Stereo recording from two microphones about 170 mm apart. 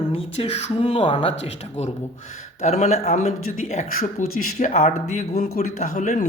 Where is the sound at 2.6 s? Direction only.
40° left (ahead or behind).